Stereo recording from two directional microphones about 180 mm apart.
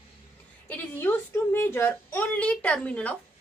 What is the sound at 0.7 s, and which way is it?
A woman's voice, 10° left (ahead or behind).